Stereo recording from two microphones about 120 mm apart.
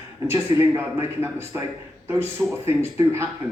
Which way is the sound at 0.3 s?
20° right (ahead or behind).